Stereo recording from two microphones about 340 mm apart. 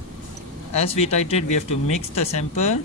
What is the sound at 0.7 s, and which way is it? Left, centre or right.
Speech, centre.